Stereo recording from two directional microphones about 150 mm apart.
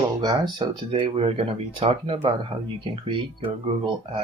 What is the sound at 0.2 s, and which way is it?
Speech, 25° right (ahead or behind).